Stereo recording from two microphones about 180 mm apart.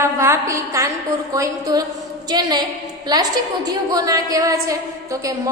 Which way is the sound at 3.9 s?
20° right (ahead or behind).